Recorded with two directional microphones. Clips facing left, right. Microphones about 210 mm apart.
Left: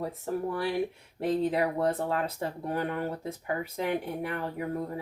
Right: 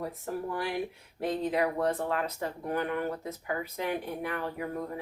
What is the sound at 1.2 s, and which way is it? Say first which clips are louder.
Speech: left 2 dB; 30° left (ahead or behind).